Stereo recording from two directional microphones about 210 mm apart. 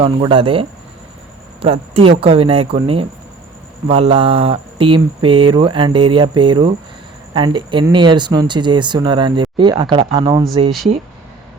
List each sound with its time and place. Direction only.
0.0 s speech: 25° right (ahead or behind)